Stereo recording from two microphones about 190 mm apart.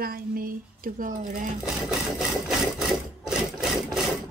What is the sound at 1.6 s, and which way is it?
Sewing machine, 5° right (ahead or behind).